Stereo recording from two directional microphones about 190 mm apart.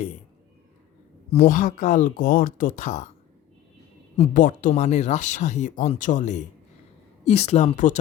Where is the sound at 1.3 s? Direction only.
45° left (ahead or behind).